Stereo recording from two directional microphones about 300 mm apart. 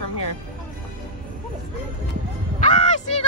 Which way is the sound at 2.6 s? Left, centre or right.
Left.